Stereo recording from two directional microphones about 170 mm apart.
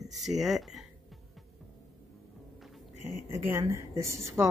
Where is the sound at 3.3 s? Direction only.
15° right (ahead or behind).